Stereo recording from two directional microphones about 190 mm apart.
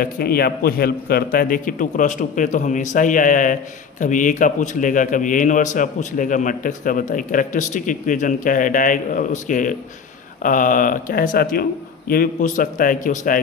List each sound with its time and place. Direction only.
0.0 s a man's voice: 55° left (ahead or behind)